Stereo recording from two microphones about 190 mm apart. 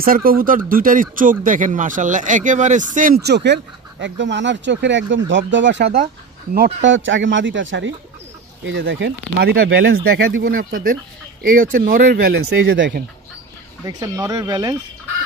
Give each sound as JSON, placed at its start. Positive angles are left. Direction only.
{"t": 0.0, "sound": "speech", "side_deg": -50}
{"t": 13.8, "sound": "speech", "side_deg": -20}